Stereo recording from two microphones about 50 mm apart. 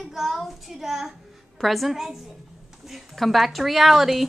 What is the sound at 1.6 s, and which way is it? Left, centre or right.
A woman's voice, centre.